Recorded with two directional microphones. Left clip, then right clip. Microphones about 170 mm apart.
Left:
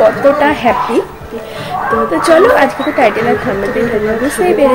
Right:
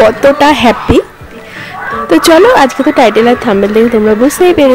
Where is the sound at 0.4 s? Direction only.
75° right (ahead or behind).